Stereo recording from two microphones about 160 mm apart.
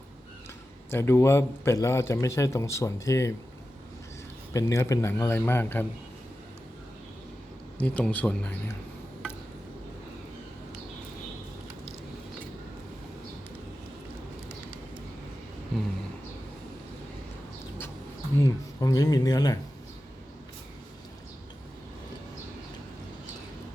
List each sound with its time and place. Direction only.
0.9 s a man's voice: 15° left (ahead or behind)
4.5 s a man's voice: 20° left (ahead or behind)
7.8 s a man's voice: 10° left (ahead or behind)
15.7 s a sound: centre (ahead or behind)
18.3 s speech: 20° left (ahead or behind)